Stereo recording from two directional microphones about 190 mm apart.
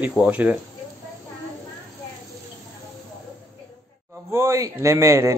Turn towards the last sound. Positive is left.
turn(degrees=-15)  # may be behind; listen again after turning